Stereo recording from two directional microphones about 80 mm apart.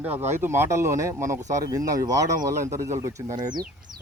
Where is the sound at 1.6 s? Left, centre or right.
Right.